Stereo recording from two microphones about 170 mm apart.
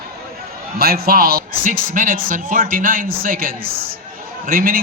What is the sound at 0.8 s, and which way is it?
A man's voice, 65° right (ahead or behind).